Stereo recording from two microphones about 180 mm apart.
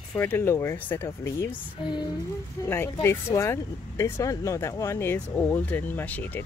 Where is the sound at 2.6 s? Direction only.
15° left (ahead or behind).